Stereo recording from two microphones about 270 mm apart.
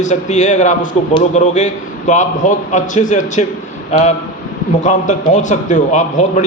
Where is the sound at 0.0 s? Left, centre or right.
Left.